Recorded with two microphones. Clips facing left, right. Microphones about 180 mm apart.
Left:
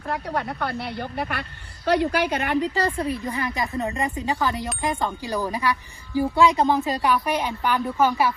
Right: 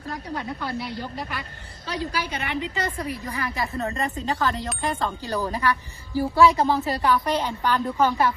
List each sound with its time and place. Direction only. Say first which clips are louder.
0.1 s a woman's voice: left 4 dB; 65° left (ahead or behind); by 8.3 s 10° left (ahead or behind)